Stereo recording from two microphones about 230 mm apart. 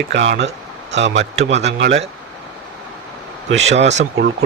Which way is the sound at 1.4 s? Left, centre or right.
Right.